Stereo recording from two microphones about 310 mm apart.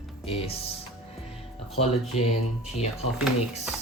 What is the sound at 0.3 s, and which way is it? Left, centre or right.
Music, centre.